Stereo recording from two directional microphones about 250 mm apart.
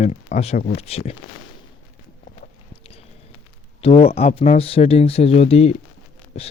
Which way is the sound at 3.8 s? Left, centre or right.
Left.